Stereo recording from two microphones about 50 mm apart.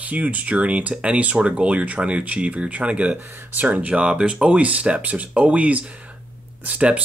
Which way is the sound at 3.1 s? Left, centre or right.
Right.